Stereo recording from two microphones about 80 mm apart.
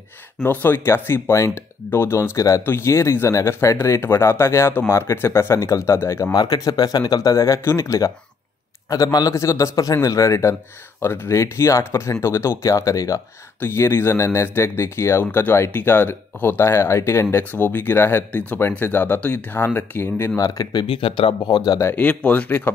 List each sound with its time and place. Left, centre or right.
0.4 s speech: left
2.3 s speech: left
2.6 s speech: left
6.3 s speech: left
13.6 s speech: left
20.3 s speech: left
20.8 s speech: left
21.9 s speech: centre